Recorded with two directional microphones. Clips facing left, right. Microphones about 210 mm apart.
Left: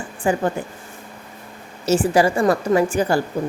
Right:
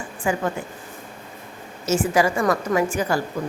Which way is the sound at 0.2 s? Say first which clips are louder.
Left 4 dB; 35° left (ahead or behind).